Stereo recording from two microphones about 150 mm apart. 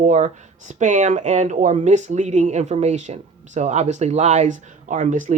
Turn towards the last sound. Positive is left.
turn(degrees=-55)  # may be behind; listen again after turning